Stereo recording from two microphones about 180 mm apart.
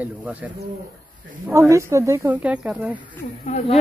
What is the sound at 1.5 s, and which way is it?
Speech, 15° right (ahead or behind).